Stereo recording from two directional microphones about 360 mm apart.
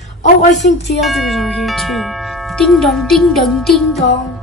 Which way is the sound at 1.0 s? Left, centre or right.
Centre.